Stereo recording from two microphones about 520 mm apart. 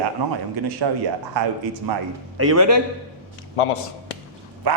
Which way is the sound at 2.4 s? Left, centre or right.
Right.